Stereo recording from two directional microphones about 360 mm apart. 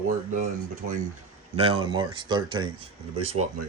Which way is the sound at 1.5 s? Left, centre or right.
Centre.